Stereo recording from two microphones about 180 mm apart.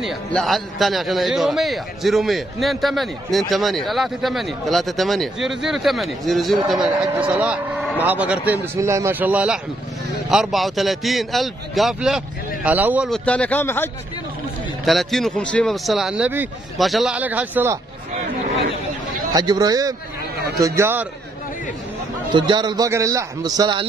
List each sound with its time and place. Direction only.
0.0 s a man's voice: centre (ahead or behind)
13.1 s a man's voice: 5° left (ahead or behind)
14.9 s a man's voice: centre (ahead or behind)
19.3 s a man's voice: 20° right (ahead or behind)
22.3 s a man's voice: 25° right (ahead or behind)